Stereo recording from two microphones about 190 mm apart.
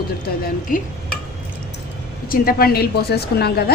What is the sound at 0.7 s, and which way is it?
Speech, 45° left (ahead or behind).